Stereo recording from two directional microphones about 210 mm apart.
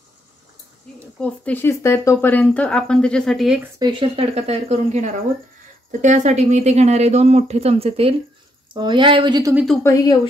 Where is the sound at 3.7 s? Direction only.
20° right (ahead or behind).